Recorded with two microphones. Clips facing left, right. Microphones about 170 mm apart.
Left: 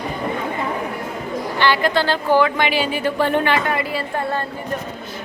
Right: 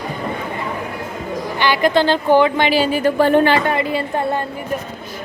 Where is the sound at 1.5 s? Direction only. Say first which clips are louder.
Right 3 dB; 15° right (ahead or behind).